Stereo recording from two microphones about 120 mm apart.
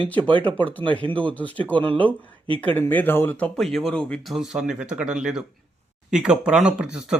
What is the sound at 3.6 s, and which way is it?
Speech, centre (ahead or behind).